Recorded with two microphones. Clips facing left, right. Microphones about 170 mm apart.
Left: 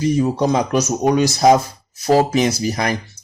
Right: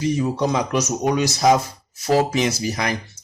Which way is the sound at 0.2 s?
40° left (ahead or behind).